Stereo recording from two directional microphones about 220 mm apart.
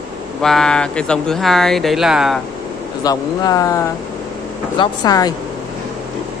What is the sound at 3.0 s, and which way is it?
Speech, 15° left (ahead or behind).